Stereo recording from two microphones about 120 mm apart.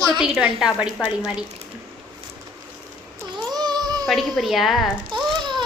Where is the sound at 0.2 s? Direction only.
5° right (ahead or behind).